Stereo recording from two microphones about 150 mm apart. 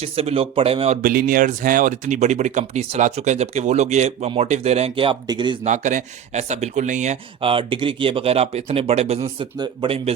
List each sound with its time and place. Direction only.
0.0 s speech: 40° right (ahead or behind)
1.0 s speech: 70° right (ahead or behind); by 5.5 s 30° right (ahead or behind)
5.6 s speech: 55° right (ahead or behind); by 10.0 s 35° right (ahead or behind)